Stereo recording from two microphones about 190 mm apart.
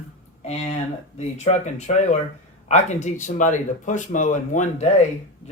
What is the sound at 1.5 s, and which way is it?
Speech, 40° left (ahead or behind).